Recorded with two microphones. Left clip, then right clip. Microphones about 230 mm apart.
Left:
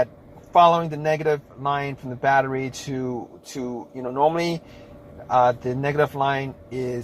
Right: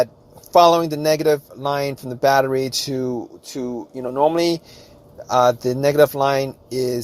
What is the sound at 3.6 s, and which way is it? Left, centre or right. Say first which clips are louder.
Speech: right 3 dB; right.